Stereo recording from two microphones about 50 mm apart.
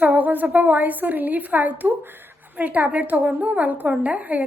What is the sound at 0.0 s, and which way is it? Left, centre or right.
A woman's voice, right.